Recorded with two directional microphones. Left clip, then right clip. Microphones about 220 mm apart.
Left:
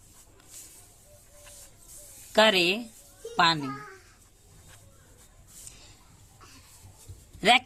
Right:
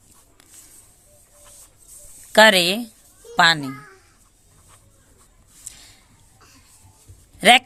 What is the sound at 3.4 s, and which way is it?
Speech, 40° right (ahead or behind).